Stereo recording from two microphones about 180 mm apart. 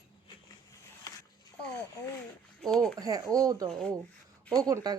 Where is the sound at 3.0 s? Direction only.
20° right (ahead or behind).